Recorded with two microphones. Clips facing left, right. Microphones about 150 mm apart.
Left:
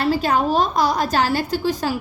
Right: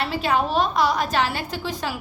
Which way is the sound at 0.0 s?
40° left (ahead or behind).